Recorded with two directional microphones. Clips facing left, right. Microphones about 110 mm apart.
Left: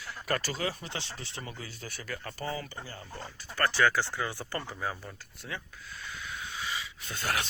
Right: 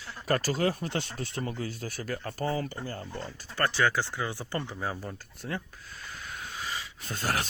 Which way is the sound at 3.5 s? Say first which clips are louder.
Even; 20° right (ahead or behind).